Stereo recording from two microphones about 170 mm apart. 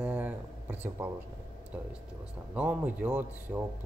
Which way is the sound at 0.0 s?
10° right (ahead or behind).